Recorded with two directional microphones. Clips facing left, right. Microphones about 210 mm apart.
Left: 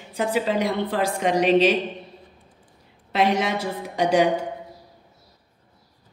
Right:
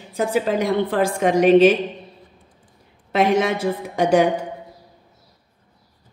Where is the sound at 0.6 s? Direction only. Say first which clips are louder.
Right 4 dB; 50° right (ahead or behind).